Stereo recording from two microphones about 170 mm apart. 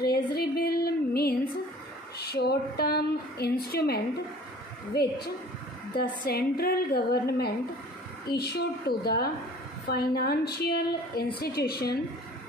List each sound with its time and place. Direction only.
0.0 s a sound: 65° left (ahead or behind)
2.3 s a woman's voice: 65° left (ahead or behind)
5.9 s a woman's voice: 65° left (ahead or behind)